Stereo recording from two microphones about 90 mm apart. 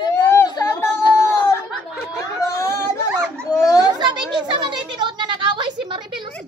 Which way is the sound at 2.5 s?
30° left (ahead or behind).